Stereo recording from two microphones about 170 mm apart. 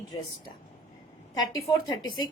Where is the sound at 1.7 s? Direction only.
25° left (ahead or behind).